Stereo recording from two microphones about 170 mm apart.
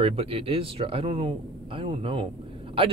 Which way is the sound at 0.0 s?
35° right (ahead or behind).